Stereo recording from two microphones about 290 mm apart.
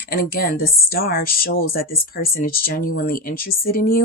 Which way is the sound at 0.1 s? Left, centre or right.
Left.